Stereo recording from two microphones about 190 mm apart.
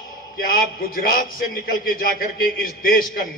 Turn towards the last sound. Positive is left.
turn(degrees=50)  # may be behind; listen again after turning